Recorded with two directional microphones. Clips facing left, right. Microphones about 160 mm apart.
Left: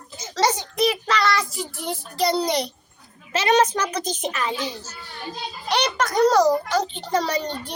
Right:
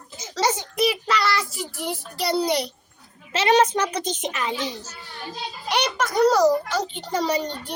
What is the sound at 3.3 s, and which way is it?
A child's voice, 30° right (ahead or behind).